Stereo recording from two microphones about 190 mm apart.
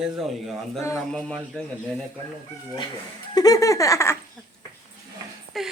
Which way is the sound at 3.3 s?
20° left (ahead or behind).